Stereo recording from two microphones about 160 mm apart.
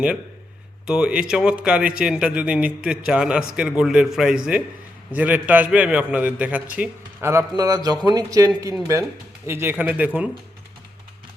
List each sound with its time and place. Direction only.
0.9 s a man's voice: 5° right (ahead or behind)